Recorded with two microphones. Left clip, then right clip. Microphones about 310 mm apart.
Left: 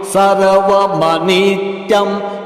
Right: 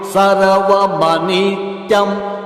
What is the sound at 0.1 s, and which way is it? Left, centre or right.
Mantra, left.